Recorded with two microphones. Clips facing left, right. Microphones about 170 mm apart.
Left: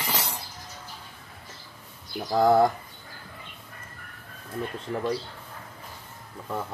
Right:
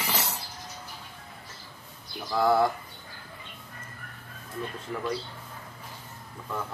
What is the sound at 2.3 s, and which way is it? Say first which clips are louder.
Speech: left 4 dB; 40° left (ahead or behind).